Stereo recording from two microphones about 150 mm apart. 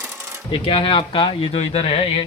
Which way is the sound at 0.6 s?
35° left (ahead or behind).